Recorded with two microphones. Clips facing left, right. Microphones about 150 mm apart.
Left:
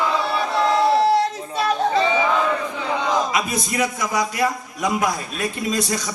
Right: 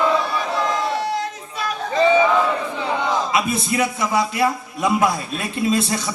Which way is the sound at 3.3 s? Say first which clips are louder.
Right 3 dB; 25° right (ahead or behind).